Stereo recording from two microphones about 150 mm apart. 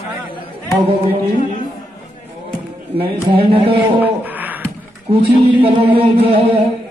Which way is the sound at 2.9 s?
40° right (ahead or behind).